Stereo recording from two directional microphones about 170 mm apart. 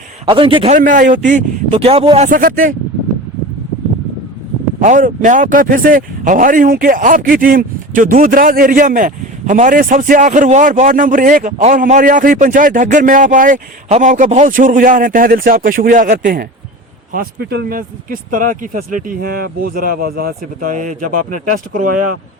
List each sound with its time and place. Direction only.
0.3 s a man's voice: 30° right (ahead or behind)
0.8 s speech: 50° right (ahead or behind); by 2.2 s 35° right (ahead or behind)
2.2 s speech: 55° right (ahead or behind)
4.8 s speech: 50° right (ahead or behind)
17.1 s speech: 65° right (ahead or behind)